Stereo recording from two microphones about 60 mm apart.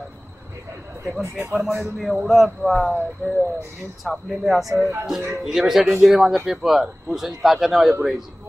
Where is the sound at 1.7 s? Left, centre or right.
Right.